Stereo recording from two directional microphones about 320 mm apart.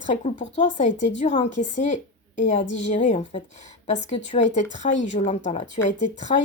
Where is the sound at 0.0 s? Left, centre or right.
Left.